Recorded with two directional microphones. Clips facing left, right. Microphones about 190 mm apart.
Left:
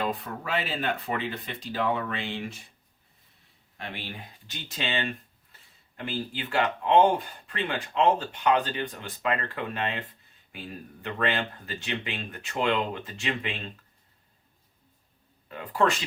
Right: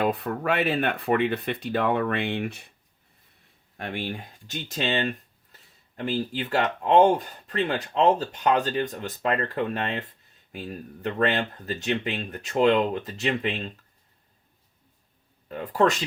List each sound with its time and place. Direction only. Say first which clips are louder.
0.0 s speech: right 6 dB; 60° right (ahead or behind)
3.8 s speech: right 7 dB; 50° right (ahead or behind)
15.4 s speech: right 4 dB; 40° right (ahead or behind)